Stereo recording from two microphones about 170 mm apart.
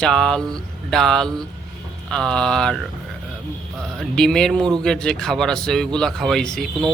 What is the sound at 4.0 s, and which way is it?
Speech, 5° left (ahead or behind).